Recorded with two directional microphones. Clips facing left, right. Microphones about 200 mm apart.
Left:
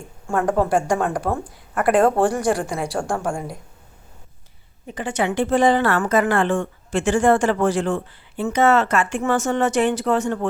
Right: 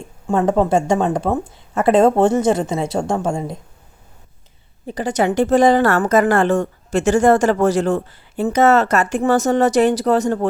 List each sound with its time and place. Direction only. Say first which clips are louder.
0.3 s a woman's voice: right 4 dB; 25° right (ahead or behind)
4.9 s a woman's voice: right 5 dB; 40° right (ahead or behind)